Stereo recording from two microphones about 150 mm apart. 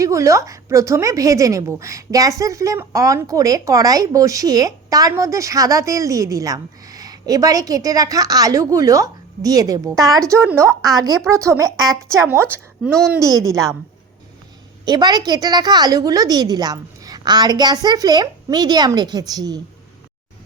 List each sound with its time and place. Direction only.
0.0 s a woman's voice: 20° right (ahead or behind)
14.8 s a woman's voice: 25° right (ahead or behind)